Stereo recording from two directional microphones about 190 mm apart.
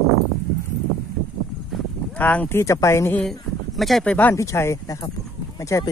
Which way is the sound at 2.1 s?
10° left (ahead or behind).